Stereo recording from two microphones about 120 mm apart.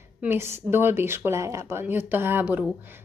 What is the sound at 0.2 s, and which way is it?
Speech, 20° right (ahead or behind).